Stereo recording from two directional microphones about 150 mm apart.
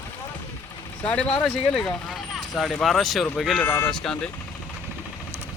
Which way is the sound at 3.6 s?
15° left (ahead or behind).